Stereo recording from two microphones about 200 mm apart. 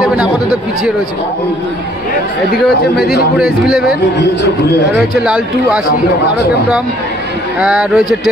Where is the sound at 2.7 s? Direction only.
55° left (ahead or behind).